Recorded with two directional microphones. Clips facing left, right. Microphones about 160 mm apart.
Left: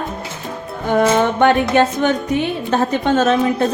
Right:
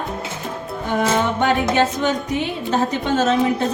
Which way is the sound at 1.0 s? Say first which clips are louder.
Left 5 dB; 55° left (ahead or behind).